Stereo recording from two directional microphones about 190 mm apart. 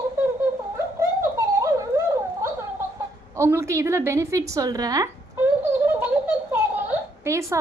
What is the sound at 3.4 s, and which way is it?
A woman's voice, 15° right (ahead or behind).